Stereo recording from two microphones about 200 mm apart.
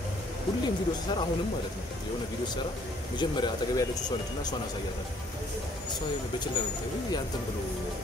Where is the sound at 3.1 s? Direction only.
20° left (ahead or behind).